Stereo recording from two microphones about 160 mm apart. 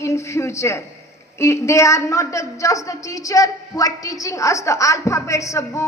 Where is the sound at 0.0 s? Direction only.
15° left (ahead or behind).